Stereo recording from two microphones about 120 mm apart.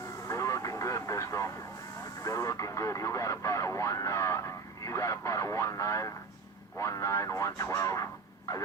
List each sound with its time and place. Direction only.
0.3 s vehicle: 25° left (ahead or behind)
2.2 s radio: 25° left (ahead or behind)